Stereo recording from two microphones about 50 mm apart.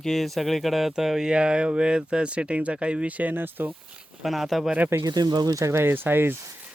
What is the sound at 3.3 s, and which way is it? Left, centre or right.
Speech, right.